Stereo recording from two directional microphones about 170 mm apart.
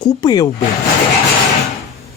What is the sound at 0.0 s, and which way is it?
Speech, 25° left (ahead or behind).